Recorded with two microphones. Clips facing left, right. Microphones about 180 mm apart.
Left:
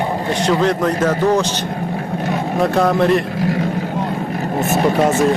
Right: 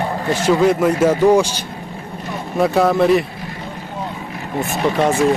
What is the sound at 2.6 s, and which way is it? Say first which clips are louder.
Speech: right 1 dB; 5° right (ahead or behind).